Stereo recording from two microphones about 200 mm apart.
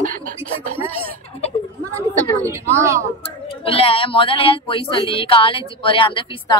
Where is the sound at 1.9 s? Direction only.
15° right (ahead or behind).